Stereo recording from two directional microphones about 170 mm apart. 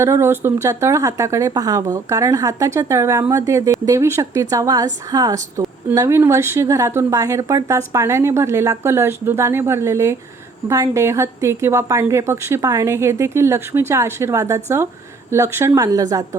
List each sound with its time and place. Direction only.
0.0 s speech: 15° right (ahead or behind)